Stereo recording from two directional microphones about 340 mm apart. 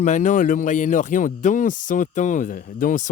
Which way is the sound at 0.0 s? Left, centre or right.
Left.